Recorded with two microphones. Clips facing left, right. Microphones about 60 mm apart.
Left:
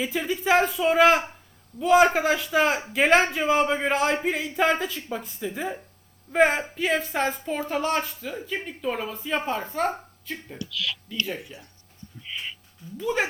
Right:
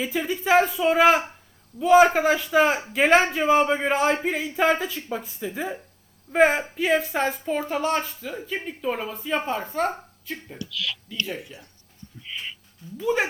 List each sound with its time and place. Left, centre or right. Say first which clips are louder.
0.0 s speech: even; centre
13.1 s a woman's voice: right 2 dB; right